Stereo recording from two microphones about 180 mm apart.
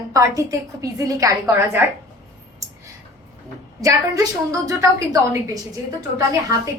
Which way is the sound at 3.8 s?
20° right (ahead or behind).